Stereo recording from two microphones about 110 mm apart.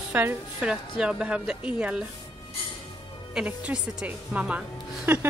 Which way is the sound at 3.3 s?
10° right (ahead or behind).